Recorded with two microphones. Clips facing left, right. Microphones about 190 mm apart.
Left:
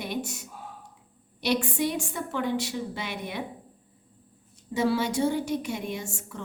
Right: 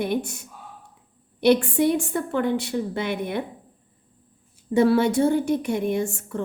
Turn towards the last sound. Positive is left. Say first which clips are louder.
# right 10 dB
turn(degrees=-55)  # may be behind; listen again after turning